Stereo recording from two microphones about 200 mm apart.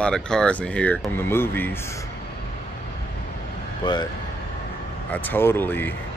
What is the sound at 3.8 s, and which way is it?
Speech, 20° left (ahead or behind).